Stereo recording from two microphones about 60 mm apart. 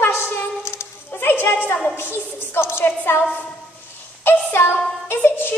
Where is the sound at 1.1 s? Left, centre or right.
Left.